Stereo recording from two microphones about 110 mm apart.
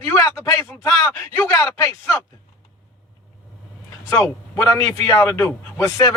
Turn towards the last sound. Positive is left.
turn(degrees=30)  # may be behind; listen again after turning